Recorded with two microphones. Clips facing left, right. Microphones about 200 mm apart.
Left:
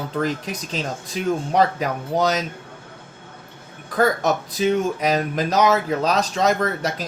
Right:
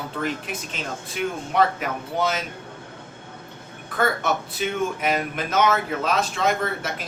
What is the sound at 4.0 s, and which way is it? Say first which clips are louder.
Speech: left 4 dB; 35° left (ahead or behind).